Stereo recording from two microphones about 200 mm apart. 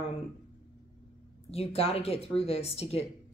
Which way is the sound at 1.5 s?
30° left (ahead or behind).